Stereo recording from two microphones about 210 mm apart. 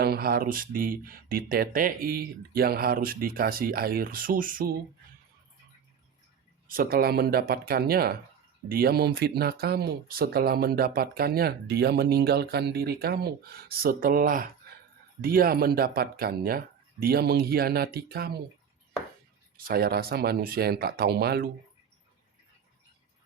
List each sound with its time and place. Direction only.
0.0 s speech: 45° right (ahead or behind)
6.7 s speech: 45° right (ahead or behind)
19.5 s speech: 45° right (ahead or behind)